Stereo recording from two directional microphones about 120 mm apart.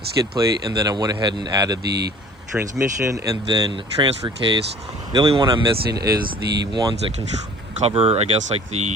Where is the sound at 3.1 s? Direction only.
30° right (ahead or behind).